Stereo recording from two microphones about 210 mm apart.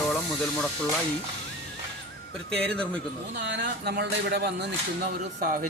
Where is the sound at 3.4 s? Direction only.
55° right (ahead or behind).